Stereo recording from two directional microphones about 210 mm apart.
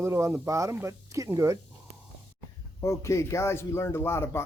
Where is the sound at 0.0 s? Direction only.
15° right (ahead or behind).